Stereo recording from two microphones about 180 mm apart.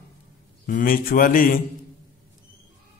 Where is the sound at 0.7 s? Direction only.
50° left (ahead or behind).